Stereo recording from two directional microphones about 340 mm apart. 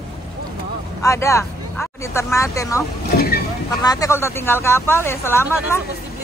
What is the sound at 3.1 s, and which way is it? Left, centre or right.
Vehicle, left.